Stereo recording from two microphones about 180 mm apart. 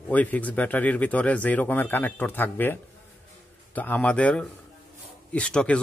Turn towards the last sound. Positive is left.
turn(degrees=5)  # may be behind; listen again after turning